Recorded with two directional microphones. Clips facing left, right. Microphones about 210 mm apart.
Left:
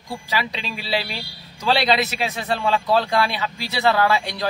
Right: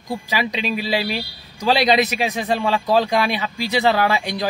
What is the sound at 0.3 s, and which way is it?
Speech, 15° right (ahead or behind).